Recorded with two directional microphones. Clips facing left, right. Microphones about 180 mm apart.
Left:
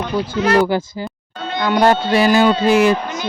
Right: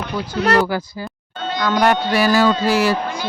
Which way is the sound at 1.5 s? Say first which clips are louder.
Left 2 dB; 25° left (ahead or behind).